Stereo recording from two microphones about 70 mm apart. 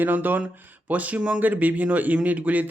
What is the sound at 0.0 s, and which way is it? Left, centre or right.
Speech, right.